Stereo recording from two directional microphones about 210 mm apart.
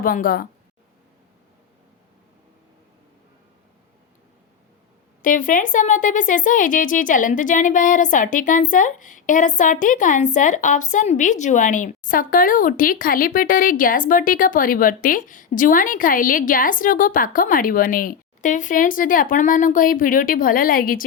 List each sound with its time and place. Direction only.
0.0 s a woman's voice: 45° left (ahead or behind)
5.2 s a woman's voice: 40° left (ahead or behind)